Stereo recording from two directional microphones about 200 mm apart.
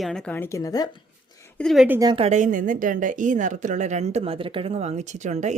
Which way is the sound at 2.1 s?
35° right (ahead or behind).